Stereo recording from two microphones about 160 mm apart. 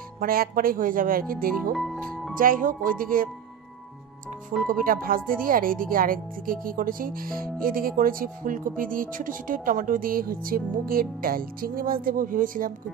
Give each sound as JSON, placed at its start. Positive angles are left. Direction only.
{"t": 0.2, "sound": "speech", "side_deg": -65}
{"t": 1.7, "sound": "music", "side_deg": 0}
{"t": 2.3, "sound": "speech", "side_deg": -60}
{"t": 4.6, "sound": "speech", "side_deg": -60}